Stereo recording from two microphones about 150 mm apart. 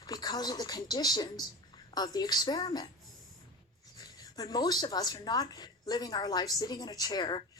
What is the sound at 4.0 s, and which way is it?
Speech, 25° left (ahead or behind).